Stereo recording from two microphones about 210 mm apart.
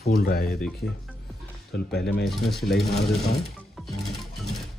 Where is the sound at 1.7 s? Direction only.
50° left (ahead or behind).